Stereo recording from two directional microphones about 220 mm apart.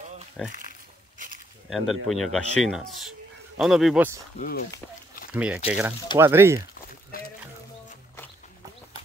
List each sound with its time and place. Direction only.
0.5 s pig: 35° right (ahead or behind)
1.7 s speech: centre (ahead or behind)
4.4 s speech: 45° left (ahead or behind)
5.3 s speech: 5° right (ahead or behind)
7.1 s music: 45° left (ahead or behind)